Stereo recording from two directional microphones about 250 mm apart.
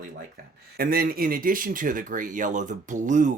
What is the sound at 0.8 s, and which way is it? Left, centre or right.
Speech, right.